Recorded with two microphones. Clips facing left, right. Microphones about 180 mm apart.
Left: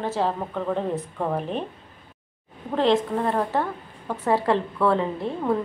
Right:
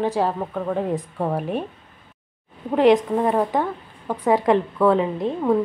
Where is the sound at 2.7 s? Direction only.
15° right (ahead or behind).